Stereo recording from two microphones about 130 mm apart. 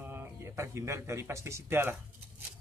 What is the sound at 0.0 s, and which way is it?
Speech, 15° right (ahead or behind).